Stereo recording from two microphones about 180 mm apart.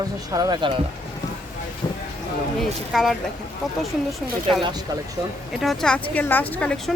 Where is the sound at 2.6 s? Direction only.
Centre (ahead or behind).